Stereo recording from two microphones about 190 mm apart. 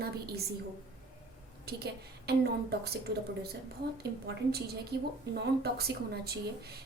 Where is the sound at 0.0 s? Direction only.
55° right (ahead or behind).